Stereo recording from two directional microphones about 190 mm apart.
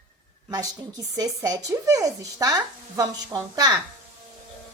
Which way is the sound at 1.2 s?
20° right (ahead or behind).